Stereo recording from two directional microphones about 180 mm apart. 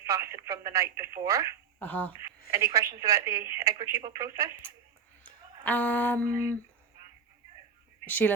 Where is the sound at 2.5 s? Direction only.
15° right (ahead or behind).